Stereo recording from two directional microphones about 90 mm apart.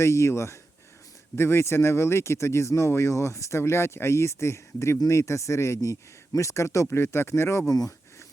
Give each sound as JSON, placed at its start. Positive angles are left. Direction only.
{"t": 0.0, "sound": "speech", "side_deg": 30}
{"t": 7.7, "sound": "speech", "side_deg": 45}